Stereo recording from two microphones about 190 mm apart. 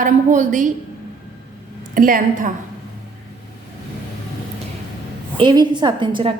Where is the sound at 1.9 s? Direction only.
45° right (ahead or behind).